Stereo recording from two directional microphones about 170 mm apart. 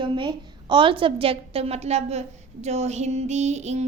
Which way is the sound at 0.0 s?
30° right (ahead or behind).